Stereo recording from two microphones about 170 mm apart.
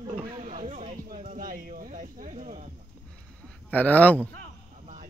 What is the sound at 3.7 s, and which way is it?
Speech, 10° left (ahead or behind).